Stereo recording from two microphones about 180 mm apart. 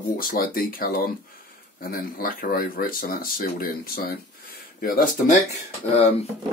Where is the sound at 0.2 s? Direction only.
50° left (ahead or behind).